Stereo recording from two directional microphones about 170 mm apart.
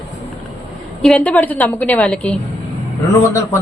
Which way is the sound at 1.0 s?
5° left (ahead or behind).